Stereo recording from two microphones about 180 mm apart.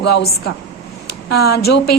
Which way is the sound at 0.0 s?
70° left (ahead or behind).